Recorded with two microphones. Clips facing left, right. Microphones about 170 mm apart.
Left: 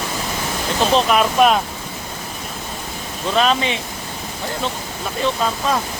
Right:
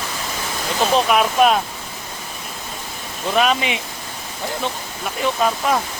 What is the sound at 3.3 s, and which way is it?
Speech, 10° right (ahead or behind).